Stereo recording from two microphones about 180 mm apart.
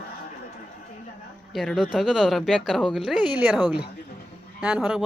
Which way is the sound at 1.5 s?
Centre (ahead or behind).